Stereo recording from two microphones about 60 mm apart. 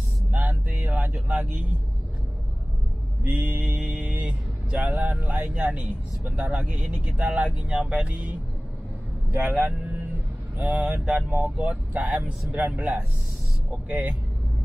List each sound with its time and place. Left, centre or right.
0.3 s vehicle: right
3.3 s speech: right
9.4 s speech: right